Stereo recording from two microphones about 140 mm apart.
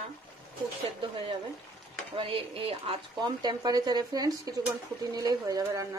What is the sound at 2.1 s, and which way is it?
A woman's voice, 40° right (ahead or behind).